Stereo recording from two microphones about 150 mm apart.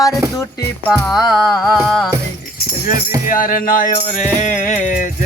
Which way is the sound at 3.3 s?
65° left (ahead or behind).